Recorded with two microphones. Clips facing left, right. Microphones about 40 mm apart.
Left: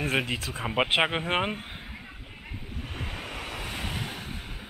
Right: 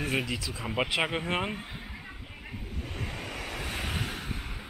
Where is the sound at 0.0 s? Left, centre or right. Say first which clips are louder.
Left 3 dB; left.